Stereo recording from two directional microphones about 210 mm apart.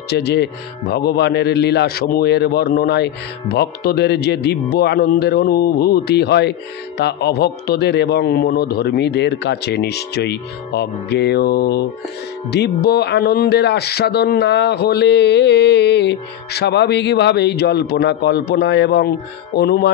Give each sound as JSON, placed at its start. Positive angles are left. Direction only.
{"t": 0.1, "sound": "speech", "side_deg": 55}